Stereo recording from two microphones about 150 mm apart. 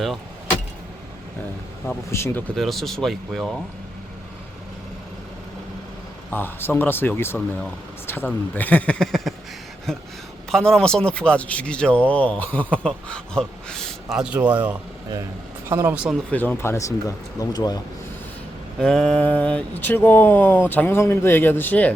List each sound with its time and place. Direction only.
2.0 s speech: 15° left (ahead or behind)
2.6 s speech: centre (ahead or behind)
6.3 s speech: 15° left (ahead or behind)
10.5 s speech: 5° left (ahead or behind); by 16.0 s 15° right (ahead or behind)
16.3 s speech: 10° left (ahead or behind); by 17.7 s 25° left (ahead or behind)
18.8 s speech: 5° left (ahead or behind)